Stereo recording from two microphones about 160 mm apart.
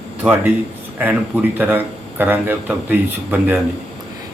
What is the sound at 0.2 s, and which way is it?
A man's voice, 10° right (ahead or behind).